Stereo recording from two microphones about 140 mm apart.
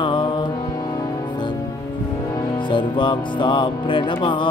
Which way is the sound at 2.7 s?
35° left (ahead or behind).